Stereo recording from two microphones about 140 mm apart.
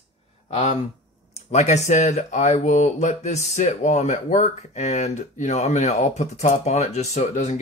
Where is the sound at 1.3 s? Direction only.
55° left (ahead or behind).